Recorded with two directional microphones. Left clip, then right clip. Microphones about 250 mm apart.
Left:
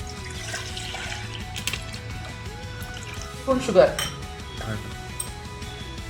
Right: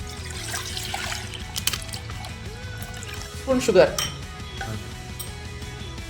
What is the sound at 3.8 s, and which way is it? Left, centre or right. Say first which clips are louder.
Speech: even; right.